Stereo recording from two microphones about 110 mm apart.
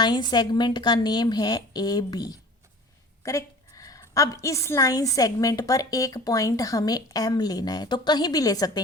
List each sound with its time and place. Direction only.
0.0 s a woman's voice: 40° left (ahead or behind)